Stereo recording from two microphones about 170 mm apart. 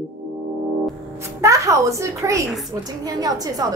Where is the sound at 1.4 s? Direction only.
20° right (ahead or behind).